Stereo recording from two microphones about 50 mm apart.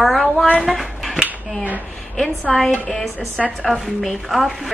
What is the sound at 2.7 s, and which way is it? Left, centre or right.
Speech, left.